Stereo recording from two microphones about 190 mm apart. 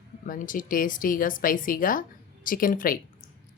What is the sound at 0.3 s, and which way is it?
A woman's voice, 45° left (ahead or behind).